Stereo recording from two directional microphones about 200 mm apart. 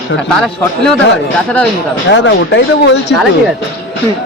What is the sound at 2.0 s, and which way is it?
Speech, 65° left (ahead or behind).